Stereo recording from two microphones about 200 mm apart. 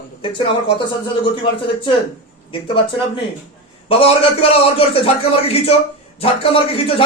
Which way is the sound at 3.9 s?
30° left (ahead or behind).